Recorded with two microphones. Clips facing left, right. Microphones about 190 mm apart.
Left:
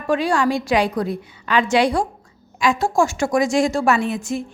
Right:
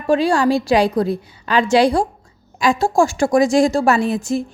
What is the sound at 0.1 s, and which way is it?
A woman's voice, 30° right (ahead or behind).